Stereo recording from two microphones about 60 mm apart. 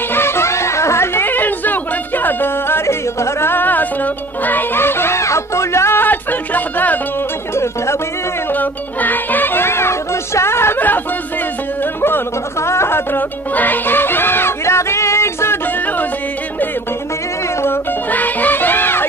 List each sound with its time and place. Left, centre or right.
0.1 s chatter: left
8.5 s music: left
12.6 s music: left
13.6 s music: left
17.6 s music: left